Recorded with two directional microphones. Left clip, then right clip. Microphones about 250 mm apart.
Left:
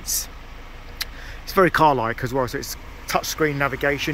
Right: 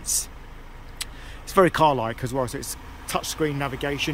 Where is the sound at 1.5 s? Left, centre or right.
Centre.